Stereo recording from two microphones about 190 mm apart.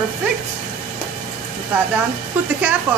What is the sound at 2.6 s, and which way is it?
Speech, 10° right (ahead or behind).